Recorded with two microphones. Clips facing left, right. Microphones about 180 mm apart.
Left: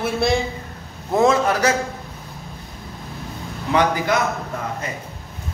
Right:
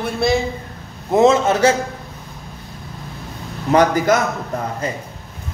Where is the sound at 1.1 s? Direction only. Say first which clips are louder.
Right 3 dB; 25° right (ahead or behind).